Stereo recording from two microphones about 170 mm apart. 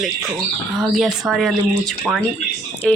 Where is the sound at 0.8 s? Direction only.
Centre (ahead or behind).